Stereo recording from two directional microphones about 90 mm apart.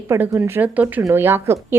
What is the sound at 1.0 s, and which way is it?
Speech, 30° right (ahead or behind).